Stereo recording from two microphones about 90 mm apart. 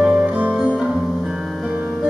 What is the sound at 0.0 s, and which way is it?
Music, 10° right (ahead or behind).